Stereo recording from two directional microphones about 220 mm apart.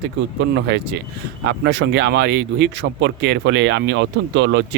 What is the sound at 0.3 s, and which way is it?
Speech, 50° right (ahead or behind).